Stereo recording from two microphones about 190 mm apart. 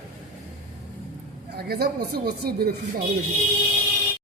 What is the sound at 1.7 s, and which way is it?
Speech, 55° right (ahead or behind).